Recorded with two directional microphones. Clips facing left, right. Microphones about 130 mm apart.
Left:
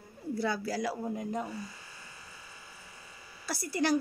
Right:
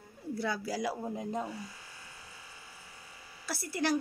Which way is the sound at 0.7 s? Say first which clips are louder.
Left 1 dB; 15° right (ahead or behind).